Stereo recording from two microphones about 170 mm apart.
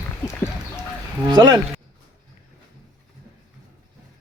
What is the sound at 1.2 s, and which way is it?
Speech, 25° right (ahead or behind).